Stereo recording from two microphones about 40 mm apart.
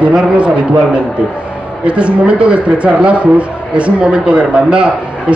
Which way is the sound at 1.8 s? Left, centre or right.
Right.